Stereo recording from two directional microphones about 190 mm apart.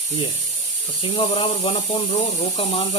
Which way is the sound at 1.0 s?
25° left (ahead or behind).